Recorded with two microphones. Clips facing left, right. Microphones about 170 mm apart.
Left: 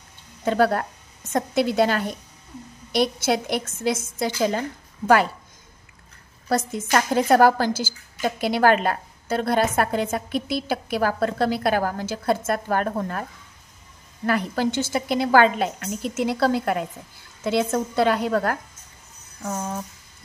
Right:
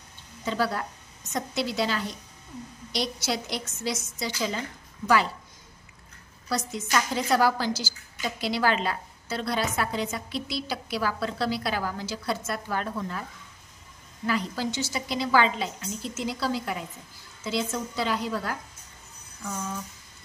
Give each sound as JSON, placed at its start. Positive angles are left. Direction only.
{"t": 0.5, "sound": "a woman's voice", "side_deg": 55}
{"t": 6.5, "sound": "a woman's voice", "side_deg": 50}
{"t": 19.4, "sound": "a woman's voice", "side_deg": 45}